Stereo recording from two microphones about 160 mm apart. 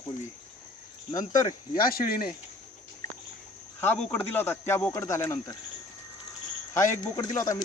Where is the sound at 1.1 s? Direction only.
25° left (ahead or behind).